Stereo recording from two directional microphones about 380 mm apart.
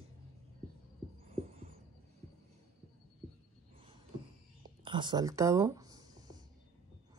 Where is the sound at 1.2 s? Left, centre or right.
Centre.